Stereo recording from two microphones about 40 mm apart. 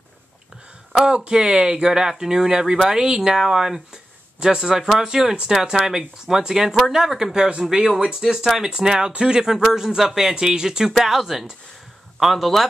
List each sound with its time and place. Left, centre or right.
1.0 s speech: right
10.9 s speech: centre